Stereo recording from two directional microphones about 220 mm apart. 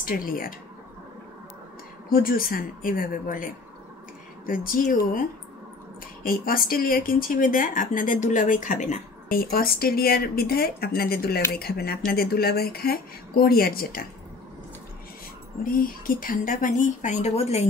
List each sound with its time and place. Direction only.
0.0 s speech: 40° left (ahead or behind)
2.0 s speech: 40° left (ahead or behind)
6.2 s a woman's voice: 40° left (ahead or behind)
15.6 s speech: 40° left (ahead or behind)